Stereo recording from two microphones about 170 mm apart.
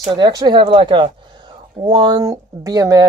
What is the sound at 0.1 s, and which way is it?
Speech, 25° right (ahead or behind).